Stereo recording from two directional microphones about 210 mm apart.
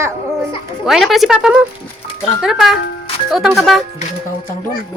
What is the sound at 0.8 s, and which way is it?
Speech, centre (ahead or behind).